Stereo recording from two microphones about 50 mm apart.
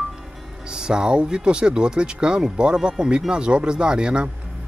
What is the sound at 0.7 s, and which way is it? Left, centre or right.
Speech, centre.